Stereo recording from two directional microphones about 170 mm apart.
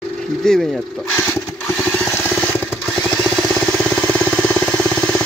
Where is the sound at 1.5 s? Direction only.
10° left (ahead or behind).